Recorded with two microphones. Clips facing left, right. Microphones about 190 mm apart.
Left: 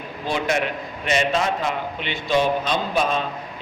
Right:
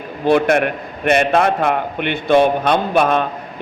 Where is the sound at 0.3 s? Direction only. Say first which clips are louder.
Right 9 dB; 60° right (ahead or behind).